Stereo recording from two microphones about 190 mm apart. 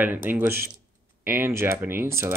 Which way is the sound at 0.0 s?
10° right (ahead or behind).